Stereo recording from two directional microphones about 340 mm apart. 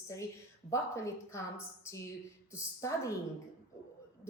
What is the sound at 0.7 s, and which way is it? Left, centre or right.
Speech, centre.